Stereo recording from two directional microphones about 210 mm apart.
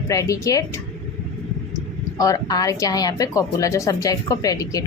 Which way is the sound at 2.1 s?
15° left (ahead or behind).